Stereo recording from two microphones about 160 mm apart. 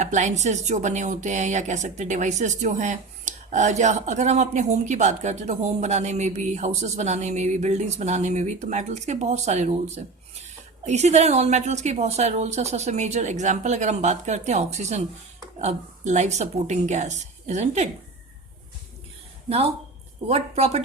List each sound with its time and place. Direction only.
0.0 s a woman's voice: 50° right (ahead or behind)
19.5 s speech: 40° right (ahead or behind)